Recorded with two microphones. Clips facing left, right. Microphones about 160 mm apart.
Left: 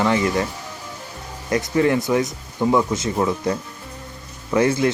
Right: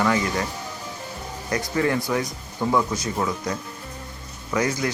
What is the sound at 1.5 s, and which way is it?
Speech, 20° left (ahead or behind).